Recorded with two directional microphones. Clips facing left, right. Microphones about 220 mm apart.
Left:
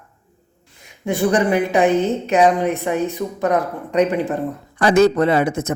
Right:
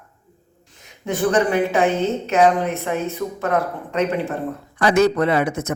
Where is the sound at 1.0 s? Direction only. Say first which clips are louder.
Left 2 dB; 15° left (ahead or behind).